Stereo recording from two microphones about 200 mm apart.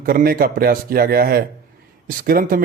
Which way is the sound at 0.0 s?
45° right (ahead or behind).